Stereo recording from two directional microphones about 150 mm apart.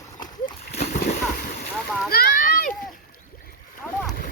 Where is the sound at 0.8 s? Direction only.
70° left (ahead or behind).